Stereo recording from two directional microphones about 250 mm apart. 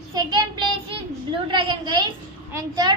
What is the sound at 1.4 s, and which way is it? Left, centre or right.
A woman's voice, centre.